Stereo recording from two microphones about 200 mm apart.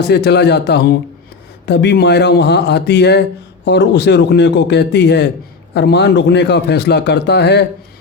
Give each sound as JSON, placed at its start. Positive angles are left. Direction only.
{"t": 0.0, "sound": "speech", "side_deg": 55}